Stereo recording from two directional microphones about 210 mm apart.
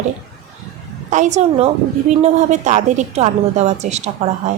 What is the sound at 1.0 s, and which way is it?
A woman's voice, 35° right (ahead or behind).